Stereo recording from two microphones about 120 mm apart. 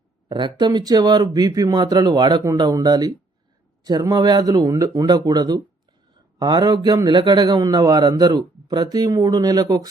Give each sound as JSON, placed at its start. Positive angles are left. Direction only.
{"t": 0.3, "sound": "a man's voice", "side_deg": -40}